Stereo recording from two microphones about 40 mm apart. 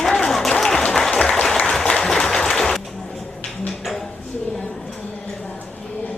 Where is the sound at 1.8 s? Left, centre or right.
Centre.